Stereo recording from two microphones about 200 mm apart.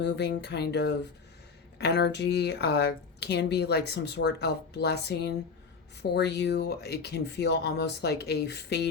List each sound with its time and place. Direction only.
0.0 s speech: 55° left (ahead or behind)